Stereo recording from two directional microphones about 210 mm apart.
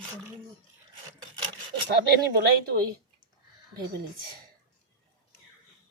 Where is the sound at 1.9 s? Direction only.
50° right (ahead or behind).